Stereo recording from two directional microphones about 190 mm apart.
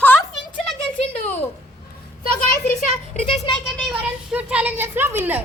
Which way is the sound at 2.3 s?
45° left (ahead or behind).